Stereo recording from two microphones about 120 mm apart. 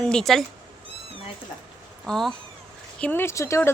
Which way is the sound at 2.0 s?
5° left (ahead or behind).